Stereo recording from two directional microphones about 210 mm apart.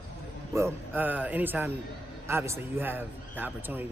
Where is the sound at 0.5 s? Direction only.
10° right (ahead or behind).